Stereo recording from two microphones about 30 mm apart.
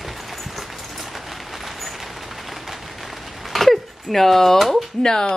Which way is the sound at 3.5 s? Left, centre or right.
Centre.